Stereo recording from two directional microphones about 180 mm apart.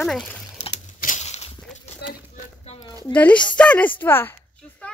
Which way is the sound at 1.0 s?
40° left (ahead or behind).